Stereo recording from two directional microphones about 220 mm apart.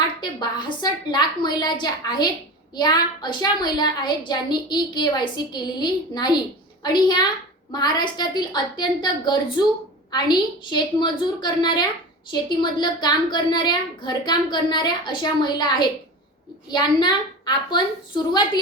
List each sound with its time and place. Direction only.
0.2 s a woman's voice: 20° left (ahead or behind)